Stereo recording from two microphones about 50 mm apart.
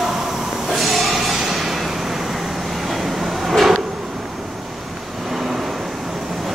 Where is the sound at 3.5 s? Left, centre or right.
Centre.